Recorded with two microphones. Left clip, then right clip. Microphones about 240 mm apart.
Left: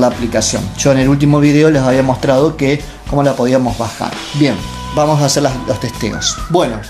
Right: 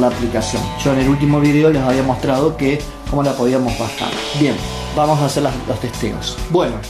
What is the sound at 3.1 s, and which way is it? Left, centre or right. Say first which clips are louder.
Speech: left 5 dB; left.